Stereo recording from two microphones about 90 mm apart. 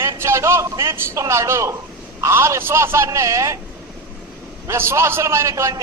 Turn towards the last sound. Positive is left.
turn(degrees=-35)  # may be behind; listen again after turning